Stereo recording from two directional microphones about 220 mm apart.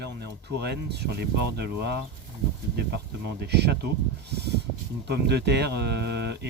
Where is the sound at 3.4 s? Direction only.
50° right (ahead or behind).